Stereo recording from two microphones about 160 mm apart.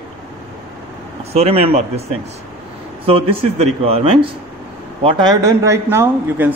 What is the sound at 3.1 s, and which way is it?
Speech, 35° right (ahead or behind).